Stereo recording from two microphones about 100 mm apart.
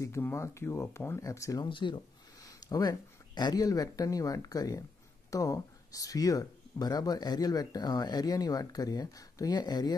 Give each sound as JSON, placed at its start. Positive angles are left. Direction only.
{"t": 0.0, "sound": "speech", "side_deg": 30}
{"t": 1.6, "sound": "speech", "side_deg": 55}
{"t": 2.4, "sound": "speech", "side_deg": 35}